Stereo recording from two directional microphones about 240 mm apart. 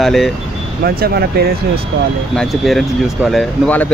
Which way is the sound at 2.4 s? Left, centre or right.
Centre.